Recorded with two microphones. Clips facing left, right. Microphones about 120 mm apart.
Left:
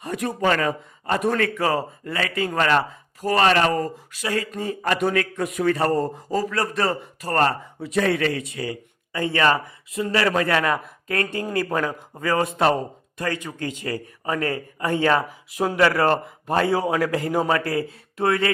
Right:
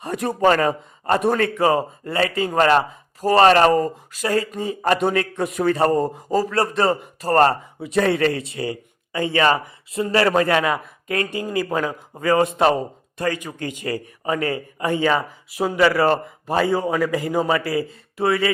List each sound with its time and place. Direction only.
0.0 s a man's voice: 35° right (ahead or behind)
4.5 s a man's voice: 15° right (ahead or behind)
4.8 s a man's voice: 30° right (ahead or behind)
5.9 s a man's voice: 15° right (ahead or behind)
6.3 s a man's voice: 30° right (ahead or behind)
9.9 s a man's voice: 35° right (ahead or behind)
11.1 s a man's voice: 15° right (ahead or behind)
14.9 s a man's voice: centre (ahead or behind)